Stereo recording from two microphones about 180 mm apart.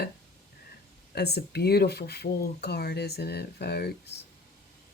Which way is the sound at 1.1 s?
65° left (ahead or behind).